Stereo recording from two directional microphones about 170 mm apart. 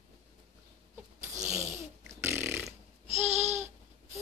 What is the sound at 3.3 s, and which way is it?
Babbling, 40° right (ahead or behind).